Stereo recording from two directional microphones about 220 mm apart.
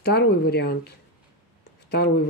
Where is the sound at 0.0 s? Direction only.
50° left (ahead or behind).